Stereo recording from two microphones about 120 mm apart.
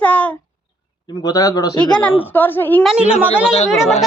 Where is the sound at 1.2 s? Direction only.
30° left (ahead or behind).